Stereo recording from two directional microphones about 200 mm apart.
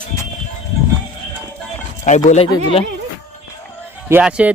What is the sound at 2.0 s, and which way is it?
Speech, 35° left (ahead or behind).